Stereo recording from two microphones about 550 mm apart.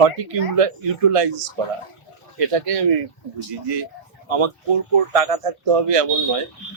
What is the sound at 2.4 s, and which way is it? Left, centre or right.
Speech, right.